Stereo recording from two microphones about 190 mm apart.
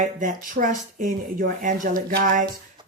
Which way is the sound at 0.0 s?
45° right (ahead or behind).